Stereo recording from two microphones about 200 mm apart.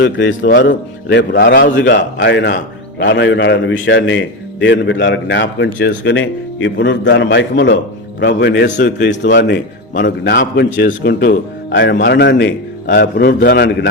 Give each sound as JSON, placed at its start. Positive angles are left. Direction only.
{"t": 0.0, "sound": "a man's voice", "side_deg": 65}